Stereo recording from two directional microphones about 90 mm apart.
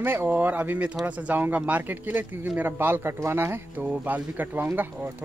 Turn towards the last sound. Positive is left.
turn(degrees=-20)  # may be behind; listen again after turning